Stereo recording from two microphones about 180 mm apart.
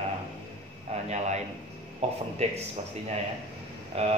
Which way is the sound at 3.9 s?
35° right (ahead or behind).